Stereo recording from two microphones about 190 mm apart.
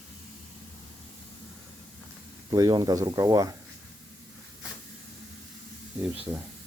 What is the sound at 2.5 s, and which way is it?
Speech, 20° right (ahead or behind).